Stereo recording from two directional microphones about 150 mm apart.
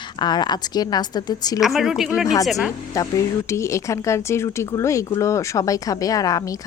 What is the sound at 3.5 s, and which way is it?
Speech, 20° left (ahead or behind).